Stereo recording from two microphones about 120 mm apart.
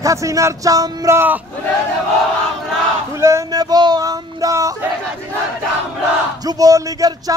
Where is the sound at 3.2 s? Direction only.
30° right (ahead or behind).